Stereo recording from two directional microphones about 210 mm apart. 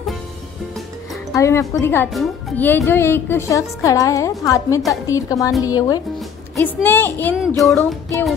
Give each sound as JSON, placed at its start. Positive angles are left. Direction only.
{"t": 1.3, "sound": "speech", "side_deg": 15}
{"t": 7.3, "sound": "child singing", "side_deg": 0}